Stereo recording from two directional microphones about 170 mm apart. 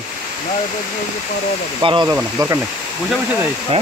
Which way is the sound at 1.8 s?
30° right (ahead or behind).